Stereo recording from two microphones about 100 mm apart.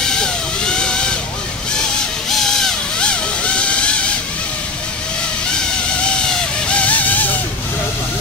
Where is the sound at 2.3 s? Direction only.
5° left (ahead or behind).